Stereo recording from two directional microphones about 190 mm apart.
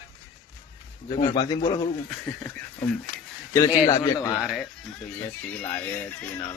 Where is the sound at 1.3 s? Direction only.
25° left (ahead or behind).